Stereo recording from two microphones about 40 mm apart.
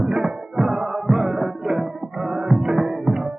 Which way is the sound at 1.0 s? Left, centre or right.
Centre.